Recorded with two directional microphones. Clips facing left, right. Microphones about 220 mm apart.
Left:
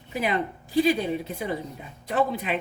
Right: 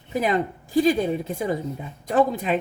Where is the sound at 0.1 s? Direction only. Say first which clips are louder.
Right 4 dB; 45° right (ahead or behind).